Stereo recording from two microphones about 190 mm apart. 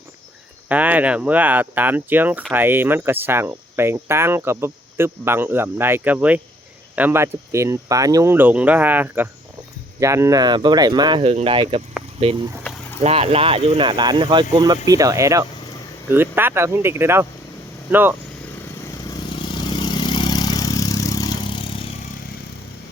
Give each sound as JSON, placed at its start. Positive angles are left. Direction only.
{"t": 0.7, "sound": "speech", "side_deg": -10}
{"t": 19.1, "sound": "vehicle", "side_deg": 25}